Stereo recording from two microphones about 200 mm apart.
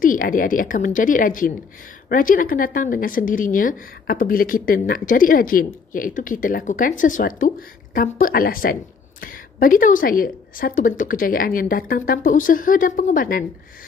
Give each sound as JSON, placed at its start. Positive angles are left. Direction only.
{"t": 0.0, "sound": "speech", "side_deg": 45}